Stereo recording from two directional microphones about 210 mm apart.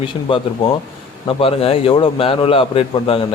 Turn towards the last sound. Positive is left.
turn(degrees=25)  # may be behind; listen again after turning